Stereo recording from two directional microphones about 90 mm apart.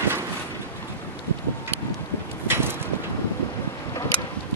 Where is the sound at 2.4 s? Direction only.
25° right (ahead or behind).